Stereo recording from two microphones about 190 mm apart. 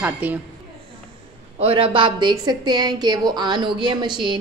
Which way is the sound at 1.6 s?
30° right (ahead or behind).